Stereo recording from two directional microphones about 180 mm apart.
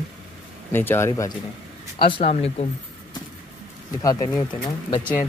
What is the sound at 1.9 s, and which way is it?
Speech, 30° left (ahead or behind).